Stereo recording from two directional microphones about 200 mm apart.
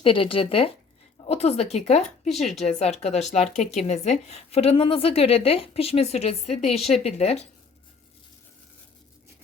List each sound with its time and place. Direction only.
0.0 s a woman's voice: 25° left (ahead or behind)
2.3 s speech: centre (ahead or behind)
2.6 s a woman's voice: 35° left (ahead or behind)